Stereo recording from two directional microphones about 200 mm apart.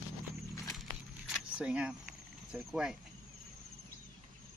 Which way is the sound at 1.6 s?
5° right (ahead or behind).